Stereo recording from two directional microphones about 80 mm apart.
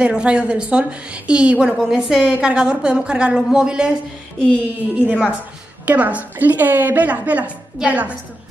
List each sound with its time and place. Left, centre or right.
0.0 s a woman's voice: centre
4.9 s a woman's voice: centre